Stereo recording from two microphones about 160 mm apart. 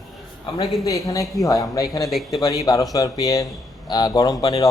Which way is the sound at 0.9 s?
20° left (ahead or behind).